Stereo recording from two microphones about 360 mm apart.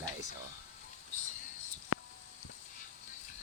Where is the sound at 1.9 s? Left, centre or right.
Left.